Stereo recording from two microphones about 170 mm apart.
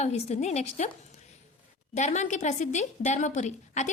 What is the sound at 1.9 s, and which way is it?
A woman's voice, 45° left (ahead or behind).